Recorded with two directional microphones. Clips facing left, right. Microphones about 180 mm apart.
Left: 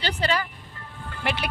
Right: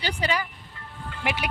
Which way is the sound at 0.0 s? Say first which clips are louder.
Left 2 dB; 10° right (ahead or behind).